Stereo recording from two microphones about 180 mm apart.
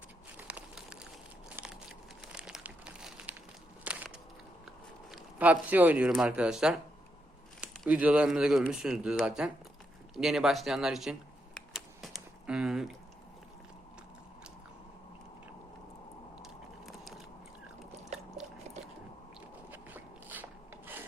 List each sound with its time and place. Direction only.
0.3 s crumpling: 5° right (ahead or behind)
1.5 s crushing: 5° right (ahead or behind)
2.2 s crumpling: 5° right (ahead or behind)
3.8 s a sound: 10° right (ahead or behind)
5.1 s speech: 10° right (ahead or behind)
10.2 s a sound: centre (ahead or behind)
16.4 s biting: centre (ahead or behind)
19.7 s filing: 10° right (ahead or behind)